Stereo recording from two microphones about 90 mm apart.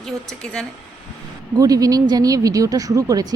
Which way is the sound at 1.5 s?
40° right (ahead or behind).